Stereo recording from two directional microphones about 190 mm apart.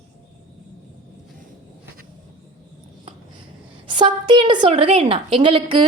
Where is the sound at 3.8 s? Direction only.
25° right (ahead or behind).